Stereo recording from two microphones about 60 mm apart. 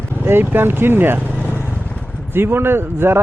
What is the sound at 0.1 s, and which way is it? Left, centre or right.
Speech, right.